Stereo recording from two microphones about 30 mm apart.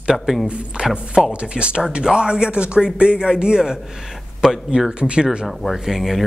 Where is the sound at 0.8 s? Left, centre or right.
Right.